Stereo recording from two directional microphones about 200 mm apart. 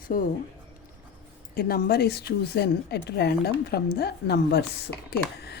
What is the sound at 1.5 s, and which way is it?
A woman's voice, 50° left (ahead or behind).